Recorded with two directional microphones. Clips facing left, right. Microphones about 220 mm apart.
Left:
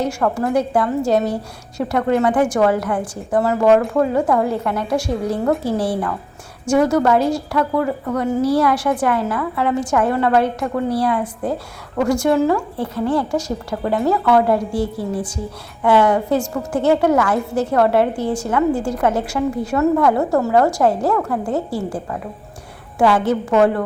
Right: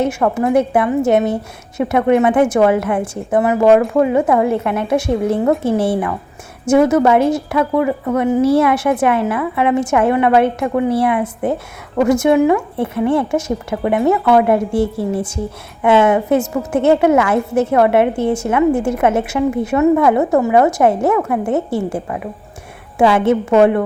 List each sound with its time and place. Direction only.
0.0 s a woman's voice: 20° right (ahead or behind)